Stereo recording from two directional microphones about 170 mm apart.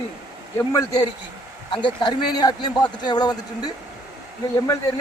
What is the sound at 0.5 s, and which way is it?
A man's voice, 20° left (ahead or behind).